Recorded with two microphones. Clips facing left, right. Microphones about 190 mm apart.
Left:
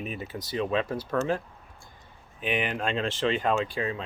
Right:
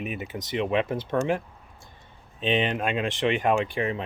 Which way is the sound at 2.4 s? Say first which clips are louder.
Right 4 dB; 25° right (ahead or behind).